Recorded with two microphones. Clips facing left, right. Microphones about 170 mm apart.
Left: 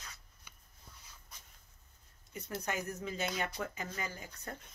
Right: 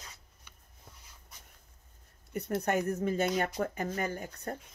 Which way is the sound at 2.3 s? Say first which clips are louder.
Right 9 dB; 60° right (ahead or behind).